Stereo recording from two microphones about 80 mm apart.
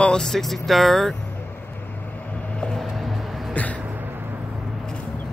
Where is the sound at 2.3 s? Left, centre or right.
Centre.